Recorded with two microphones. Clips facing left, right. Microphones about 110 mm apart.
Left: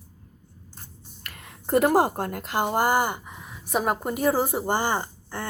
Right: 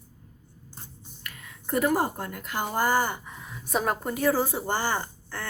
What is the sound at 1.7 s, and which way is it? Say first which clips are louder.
Speech: left 5 dB; 75° left (ahead or behind).